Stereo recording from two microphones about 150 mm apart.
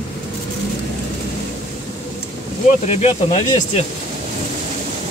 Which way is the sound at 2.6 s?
50° left (ahead or behind).